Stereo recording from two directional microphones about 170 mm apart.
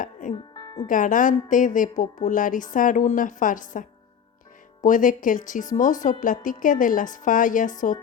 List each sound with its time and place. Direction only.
0.0 s music: 50° left (ahead or behind)
0.5 s music: 25° left (ahead or behind)
0.9 s speech: 50° left (ahead or behind)